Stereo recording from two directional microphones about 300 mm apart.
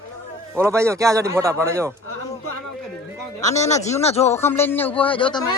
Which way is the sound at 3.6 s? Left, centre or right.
Centre.